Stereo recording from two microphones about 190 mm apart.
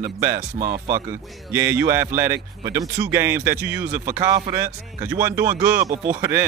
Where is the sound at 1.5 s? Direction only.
10° right (ahead or behind).